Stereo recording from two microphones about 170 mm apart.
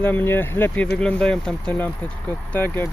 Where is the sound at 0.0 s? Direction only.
10° left (ahead or behind).